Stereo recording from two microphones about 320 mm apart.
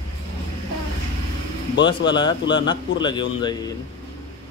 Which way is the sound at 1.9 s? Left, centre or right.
Centre.